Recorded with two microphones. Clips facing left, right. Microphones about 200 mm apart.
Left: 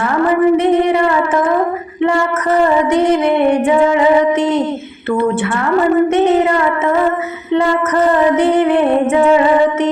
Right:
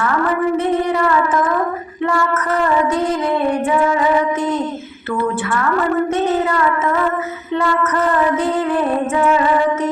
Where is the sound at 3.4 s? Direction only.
20° left (ahead or behind).